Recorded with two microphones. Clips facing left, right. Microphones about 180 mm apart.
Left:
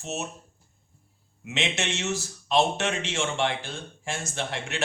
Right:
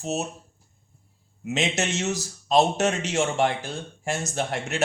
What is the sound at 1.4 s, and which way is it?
Speech, 40° right (ahead or behind).